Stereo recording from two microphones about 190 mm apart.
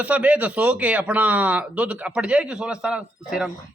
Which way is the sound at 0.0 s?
5° right (ahead or behind).